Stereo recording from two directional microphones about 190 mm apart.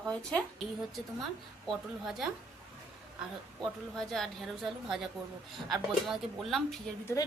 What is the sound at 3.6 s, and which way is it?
A woman's voice, centre (ahead or behind).